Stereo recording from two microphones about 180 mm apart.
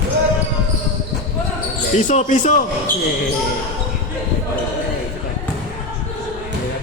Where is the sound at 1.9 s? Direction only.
40° left (ahead or behind).